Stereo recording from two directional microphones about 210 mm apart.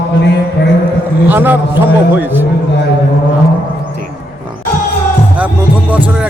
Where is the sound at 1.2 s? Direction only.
10° right (ahead or behind).